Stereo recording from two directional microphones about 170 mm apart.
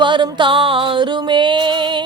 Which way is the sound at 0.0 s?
30° right (ahead or behind).